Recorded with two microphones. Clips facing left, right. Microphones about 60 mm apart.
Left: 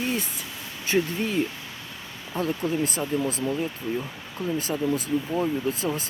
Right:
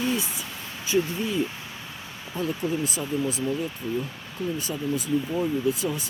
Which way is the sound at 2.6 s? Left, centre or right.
Left.